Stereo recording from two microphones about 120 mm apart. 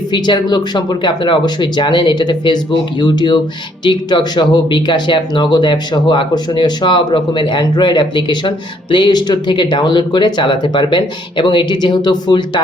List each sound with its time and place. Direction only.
0.1 s speech: 40° left (ahead or behind)